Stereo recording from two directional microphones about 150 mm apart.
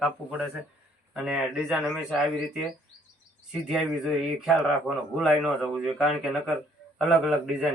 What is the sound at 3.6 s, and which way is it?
Speech, centre (ahead or behind).